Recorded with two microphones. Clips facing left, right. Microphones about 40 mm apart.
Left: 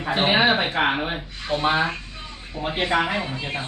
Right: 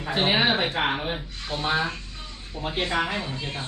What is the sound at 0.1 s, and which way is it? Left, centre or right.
Speech, centre.